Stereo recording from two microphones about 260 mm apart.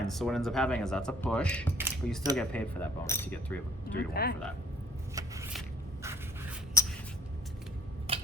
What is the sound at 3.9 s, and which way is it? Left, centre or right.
Speech, left.